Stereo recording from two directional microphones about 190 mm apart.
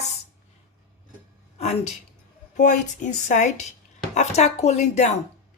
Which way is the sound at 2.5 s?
40° left (ahead or behind).